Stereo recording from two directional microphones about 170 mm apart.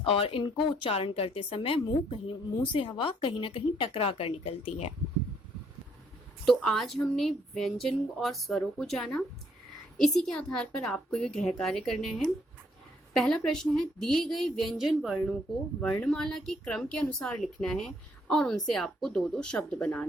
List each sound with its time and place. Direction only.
0.0 s speech: 35° left (ahead or behind)
6.4 s speech: centre (ahead or behind)